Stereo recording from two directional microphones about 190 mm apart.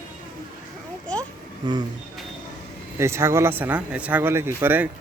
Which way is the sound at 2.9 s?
15° right (ahead or behind).